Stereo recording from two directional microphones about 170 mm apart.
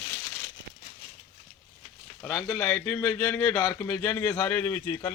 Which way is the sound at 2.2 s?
Centre (ahead or behind).